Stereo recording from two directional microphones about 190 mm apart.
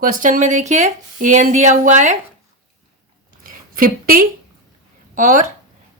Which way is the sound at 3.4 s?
50° right (ahead or behind).